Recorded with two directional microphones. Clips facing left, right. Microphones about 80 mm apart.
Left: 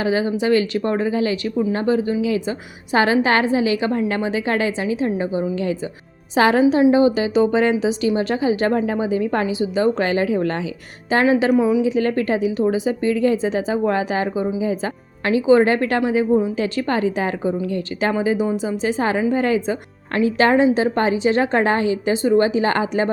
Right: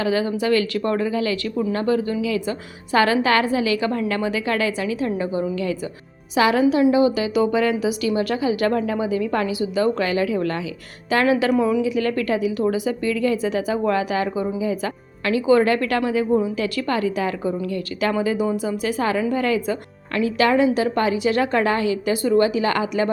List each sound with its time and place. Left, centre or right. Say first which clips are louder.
0.0 s speech: left 2 dB; left
6.3 s speech: left 2 dB; left; by 11.8 s centre
11.8 s speech: left 3 dB; left